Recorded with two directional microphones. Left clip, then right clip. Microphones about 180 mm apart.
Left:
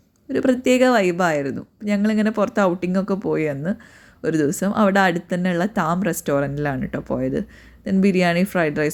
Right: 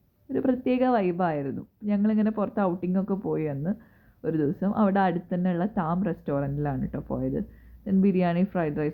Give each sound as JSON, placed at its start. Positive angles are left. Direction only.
{"t": 0.3, "sound": "speech", "side_deg": 35}